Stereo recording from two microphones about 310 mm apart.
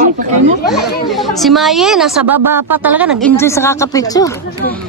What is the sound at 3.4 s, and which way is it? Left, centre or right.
Speech, centre.